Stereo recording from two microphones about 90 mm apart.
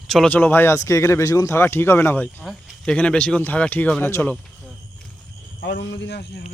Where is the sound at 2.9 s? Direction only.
15° left (ahead or behind).